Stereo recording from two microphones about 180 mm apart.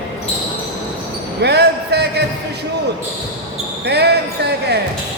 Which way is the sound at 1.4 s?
65° right (ahead or behind).